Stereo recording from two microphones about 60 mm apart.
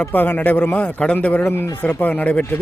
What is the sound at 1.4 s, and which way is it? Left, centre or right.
Speech, left.